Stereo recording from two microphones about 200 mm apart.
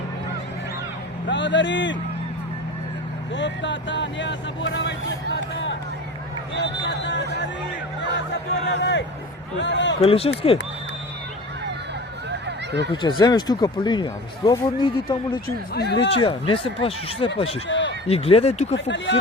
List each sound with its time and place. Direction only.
1.3 s a man's voice: 65° left (ahead or behind)
3.3 s speech: 65° left (ahead or behind)
6.8 s a sound: 60° left (ahead or behind)
8.6 s a man's voice: 65° left (ahead or behind)
10.0 s speech: 30° left (ahead or behind)
12.3 s a sound: 60° right (ahead or behind)
12.9 s speech: 20° left (ahead or behind)
15.7 s speech: 55° left (ahead or behind)
16.2 s speech: 25° left (ahead or behind)
17.7 s a sound: 65° left (ahead or behind)
18.1 s speech: 30° left (ahead or behind)
18.7 s a man's voice: 65° left (ahead or behind)